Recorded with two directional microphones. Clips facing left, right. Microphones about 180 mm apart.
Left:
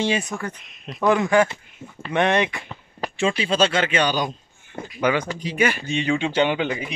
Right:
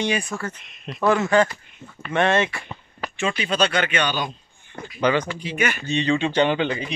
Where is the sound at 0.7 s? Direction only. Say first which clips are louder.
Right 1 dB; centre (ahead or behind).